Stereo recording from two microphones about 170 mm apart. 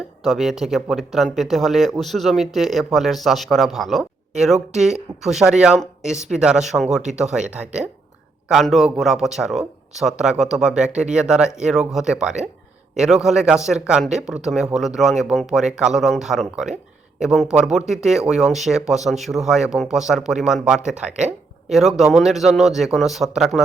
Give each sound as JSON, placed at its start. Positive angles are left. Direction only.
{"t": 0.3, "sound": "speech", "side_deg": 0}